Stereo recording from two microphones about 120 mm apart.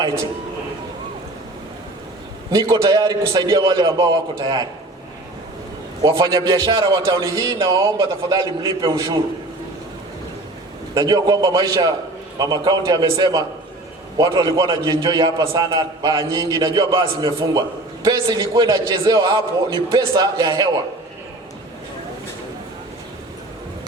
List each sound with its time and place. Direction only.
2.5 s a man's voice: 30° right (ahead or behind)
6.0 s a man's voice: 30° right (ahead or behind)
10.9 s a man's voice: 35° right (ahead or behind)